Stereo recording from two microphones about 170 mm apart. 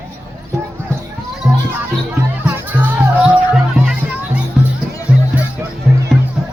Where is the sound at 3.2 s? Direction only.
5° right (ahead or behind).